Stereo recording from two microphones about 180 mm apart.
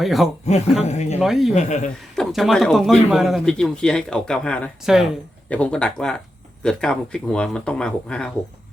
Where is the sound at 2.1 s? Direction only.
Centre (ahead or behind).